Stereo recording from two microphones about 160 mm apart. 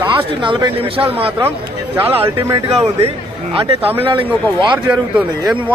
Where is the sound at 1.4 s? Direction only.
10° right (ahead or behind).